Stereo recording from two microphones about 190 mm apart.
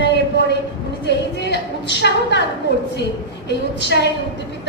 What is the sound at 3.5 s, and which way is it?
Speech, 65° left (ahead or behind).